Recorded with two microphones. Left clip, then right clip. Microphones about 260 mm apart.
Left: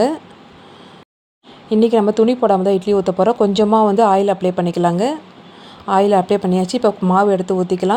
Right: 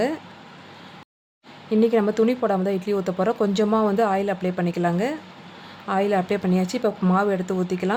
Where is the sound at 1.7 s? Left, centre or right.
Centre.